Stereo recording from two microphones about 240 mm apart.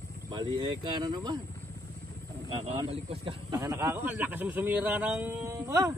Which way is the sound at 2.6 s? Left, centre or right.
Right.